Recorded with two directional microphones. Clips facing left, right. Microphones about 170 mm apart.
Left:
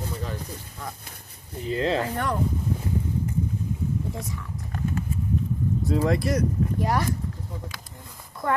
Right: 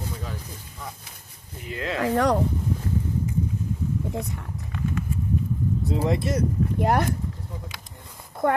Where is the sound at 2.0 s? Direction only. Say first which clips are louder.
Right 5 dB; 85° right.